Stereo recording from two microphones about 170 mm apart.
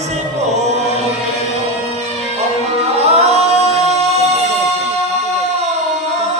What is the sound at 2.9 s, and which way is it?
Music, 40° right (ahead or behind).